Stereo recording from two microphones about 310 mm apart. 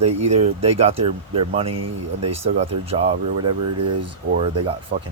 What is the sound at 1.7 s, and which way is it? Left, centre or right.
Speech, right.